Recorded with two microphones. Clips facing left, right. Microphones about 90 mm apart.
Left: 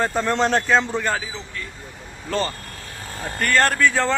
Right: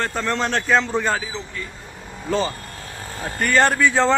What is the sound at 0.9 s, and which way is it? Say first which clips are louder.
Speech: right 2 dB; 10° right (ahead or behind).